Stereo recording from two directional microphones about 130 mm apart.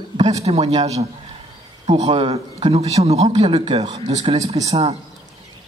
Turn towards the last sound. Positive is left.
turn(degrees=-50)  # may be behind; listen again after turning